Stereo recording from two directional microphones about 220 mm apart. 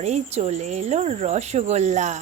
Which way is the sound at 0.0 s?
30° right (ahead or behind).